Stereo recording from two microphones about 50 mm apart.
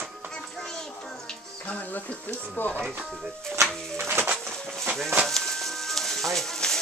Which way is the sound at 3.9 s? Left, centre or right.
Right.